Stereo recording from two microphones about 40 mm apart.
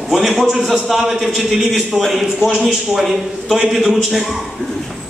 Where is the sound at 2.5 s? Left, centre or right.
Centre.